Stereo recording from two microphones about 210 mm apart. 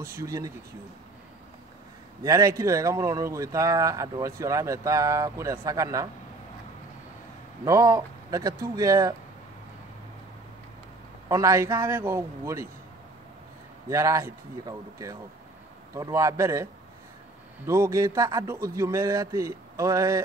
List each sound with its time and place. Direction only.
0.0 s speech: 15° right (ahead or behind)
2.2 s speech: 15° right (ahead or behind)
7.6 s speech: 15° right (ahead or behind)
11.2 s speech: 15° right (ahead or behind)
13.8 s speech: 15° right (ahead or behind)
17.6 s speech: 15° right (ahead or behind)